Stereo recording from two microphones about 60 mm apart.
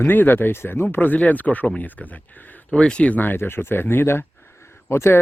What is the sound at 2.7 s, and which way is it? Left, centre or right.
Speech, centre.